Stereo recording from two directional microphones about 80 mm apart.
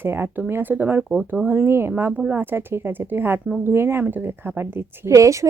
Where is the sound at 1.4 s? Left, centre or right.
Right.